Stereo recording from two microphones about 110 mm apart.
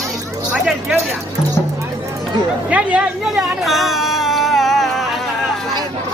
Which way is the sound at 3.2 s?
Centre (ahead or behind).